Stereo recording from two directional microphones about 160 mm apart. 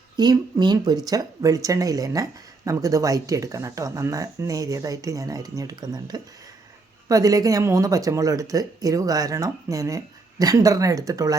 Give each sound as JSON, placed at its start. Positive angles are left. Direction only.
{"t": 0.2, "sound": "speech", "side_deg": -25}